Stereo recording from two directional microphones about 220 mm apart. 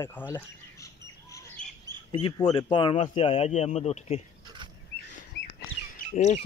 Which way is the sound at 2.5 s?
20° left (ahead or behind).